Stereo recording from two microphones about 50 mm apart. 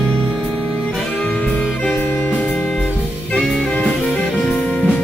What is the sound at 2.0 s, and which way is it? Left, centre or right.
Music, left.